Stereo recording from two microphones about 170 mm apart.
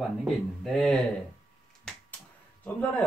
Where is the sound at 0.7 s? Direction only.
5° left (ahead or behind).